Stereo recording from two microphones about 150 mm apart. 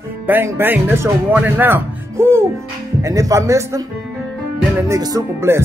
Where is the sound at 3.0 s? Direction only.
20° right (ahead or behind).